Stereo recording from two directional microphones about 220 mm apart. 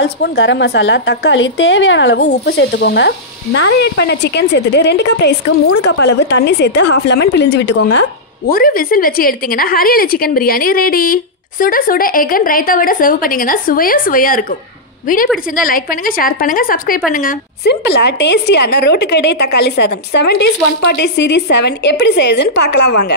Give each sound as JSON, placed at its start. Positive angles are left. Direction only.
{"t": 0.0, "sound": "a woman's voice", "side_deg": 50}